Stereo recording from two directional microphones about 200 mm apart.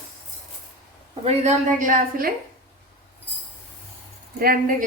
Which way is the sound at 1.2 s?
40° right (ahead or behind).